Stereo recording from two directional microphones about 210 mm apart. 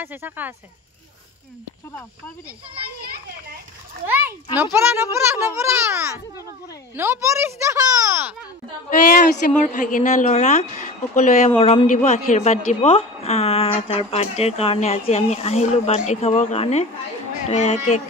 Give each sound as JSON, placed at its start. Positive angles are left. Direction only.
{"t": 0.0, "sound": "a child's voice", "side_deg": -10}
{"t": 4.7, "sound": "a child's voice", "side_deg": -10}
{"t": 8.9, "sound": "a woman's voice", "side_deg": 40}